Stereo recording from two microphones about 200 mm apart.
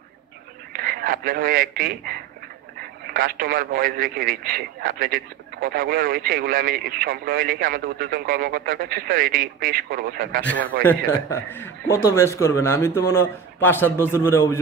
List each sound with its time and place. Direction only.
0.7 s a man's voice: 45° right (ahead or behind)
11.1 s a man's voice: 10° left (ahead or behind)